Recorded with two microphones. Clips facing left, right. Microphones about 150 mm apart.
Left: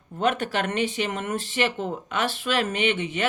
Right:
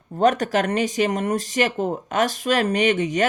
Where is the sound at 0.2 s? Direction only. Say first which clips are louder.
Right 6 dB; 40° right (ahead or behind).